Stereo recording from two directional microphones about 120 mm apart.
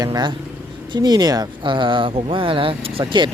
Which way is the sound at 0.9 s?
35° right (ahead or behind).